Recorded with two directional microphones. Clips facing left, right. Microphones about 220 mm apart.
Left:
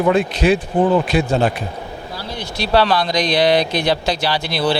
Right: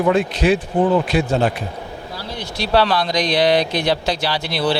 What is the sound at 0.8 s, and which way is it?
Speech, 30° left (ahead or behind).